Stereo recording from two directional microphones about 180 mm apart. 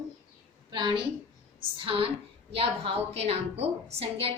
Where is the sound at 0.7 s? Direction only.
25° right (ahead or behind).